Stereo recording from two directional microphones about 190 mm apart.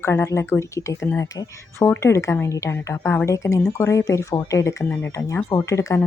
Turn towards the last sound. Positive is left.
turn(degrees=15)  # may be behind; listen again after turning